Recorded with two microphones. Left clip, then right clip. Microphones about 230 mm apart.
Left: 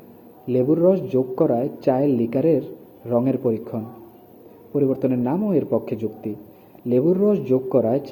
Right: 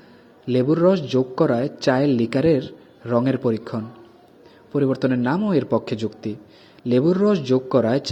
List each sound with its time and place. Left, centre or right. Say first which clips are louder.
0.4 s a man's voice: even; right